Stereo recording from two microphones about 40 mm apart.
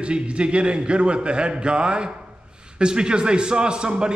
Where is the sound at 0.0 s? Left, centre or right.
Right.